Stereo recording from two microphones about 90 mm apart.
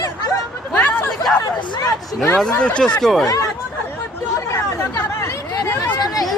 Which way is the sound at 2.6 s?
10° left (ahead or behind).